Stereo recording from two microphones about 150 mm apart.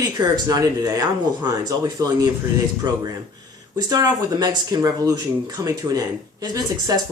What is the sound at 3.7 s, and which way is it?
Speech, 25° right (ahead or behind).